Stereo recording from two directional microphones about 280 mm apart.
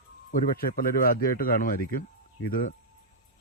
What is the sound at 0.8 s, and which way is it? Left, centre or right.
Speech, left.